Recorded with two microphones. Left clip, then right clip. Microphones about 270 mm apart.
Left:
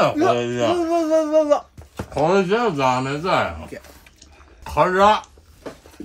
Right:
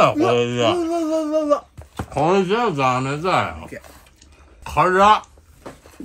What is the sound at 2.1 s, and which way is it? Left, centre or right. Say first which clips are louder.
Speech: even; right.